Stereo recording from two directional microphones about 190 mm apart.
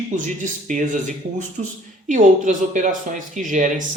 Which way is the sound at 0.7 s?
40° right (ahead or behind).